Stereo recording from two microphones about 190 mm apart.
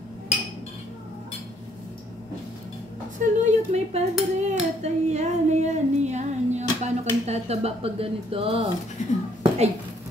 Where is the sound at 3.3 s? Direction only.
40° right (ahead or behind).